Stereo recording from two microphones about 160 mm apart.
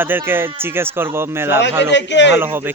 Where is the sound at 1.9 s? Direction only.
90° left.